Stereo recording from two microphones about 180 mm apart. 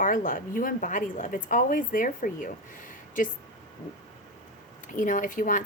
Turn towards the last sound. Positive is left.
turn(degrees=45)  # may be behind; listen again after turning